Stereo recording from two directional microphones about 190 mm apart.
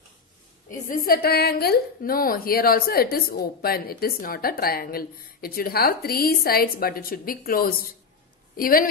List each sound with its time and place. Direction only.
0.7 s a woman's voice: 45° left (ahead or behind)